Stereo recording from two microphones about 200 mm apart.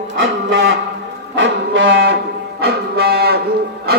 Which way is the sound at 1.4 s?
65° right (ahead or behind).